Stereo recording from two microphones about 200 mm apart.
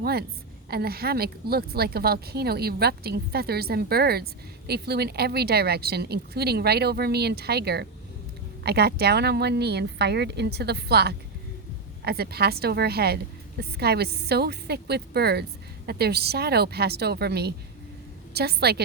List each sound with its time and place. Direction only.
0.0 s speech: 50° right (ahead or behind)